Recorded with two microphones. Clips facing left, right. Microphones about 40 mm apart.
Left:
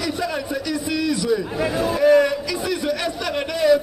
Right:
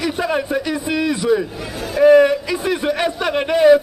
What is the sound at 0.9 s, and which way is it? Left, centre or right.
Speech, right.